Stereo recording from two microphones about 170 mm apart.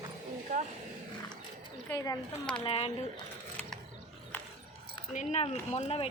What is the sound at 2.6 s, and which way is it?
Speech, 35° left (ahead or behind).